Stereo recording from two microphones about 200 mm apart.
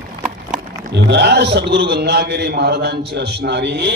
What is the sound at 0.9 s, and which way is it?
A man's voice, 60° right (ahead or behind).